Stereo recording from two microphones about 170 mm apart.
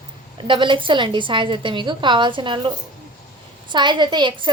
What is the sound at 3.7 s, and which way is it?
Speech, 25° right (ahead or behind).